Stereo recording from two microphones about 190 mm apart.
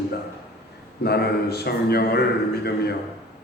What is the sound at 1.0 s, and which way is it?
A man's voice, 55° left (ahead or behind).